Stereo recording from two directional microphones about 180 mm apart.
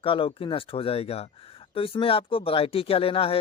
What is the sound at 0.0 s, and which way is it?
Speech, 30° left (ahead or behind).